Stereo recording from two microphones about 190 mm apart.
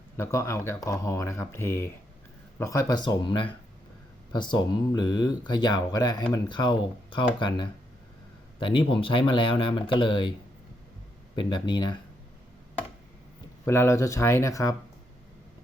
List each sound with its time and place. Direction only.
0.2 s speech: 15° left (ahead or behind)
11.3 s speech: 25° left (ahead or behind)
13.7 s speech: 15° left (ahead or behind)